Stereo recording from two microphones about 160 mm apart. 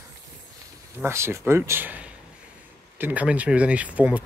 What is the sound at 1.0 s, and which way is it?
Speech, 15° right (ahead or behind).